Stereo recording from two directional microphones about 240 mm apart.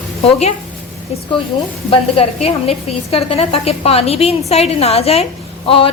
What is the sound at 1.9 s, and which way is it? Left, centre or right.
A woman's voice, left.